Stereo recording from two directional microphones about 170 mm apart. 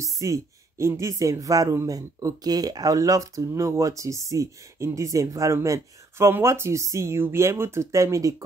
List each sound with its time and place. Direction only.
0.0 s speech: 20° right (ahead or behind)